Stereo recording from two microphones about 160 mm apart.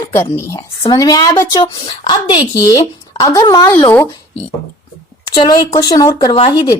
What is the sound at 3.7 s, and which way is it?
Speech, 15° left (ahead or behind).